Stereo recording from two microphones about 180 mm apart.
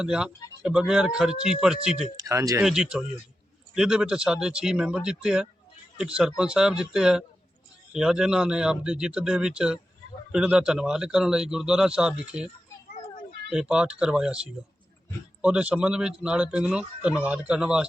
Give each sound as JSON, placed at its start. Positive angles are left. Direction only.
{"t": 0.0, "sound": "speech", "side_deg": -5}
{"t": 2.1, "sound": "speech", "side_deg": -20}
{"t": 2.6, "sound": "speech", "side_deg": -5}
{"t": 13.5, "sound": "speech", "side_deg": -5}